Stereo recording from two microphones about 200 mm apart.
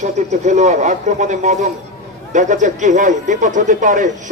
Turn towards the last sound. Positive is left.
turn(degrees=-40)  # may be behind; listen again after turning